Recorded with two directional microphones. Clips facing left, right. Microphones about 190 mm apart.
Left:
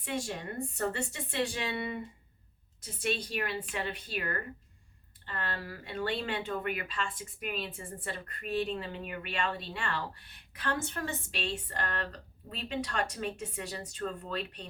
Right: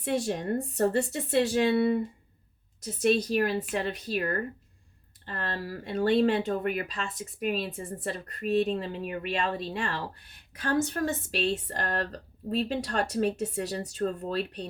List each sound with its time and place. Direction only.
0.0 s speech: 40° right (ahead or behind)
3.0 s speech: 40° right (ahead or behind)